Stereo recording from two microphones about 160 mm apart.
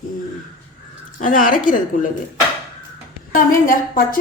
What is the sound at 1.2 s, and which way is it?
Speech, 60° left (ahead or behind).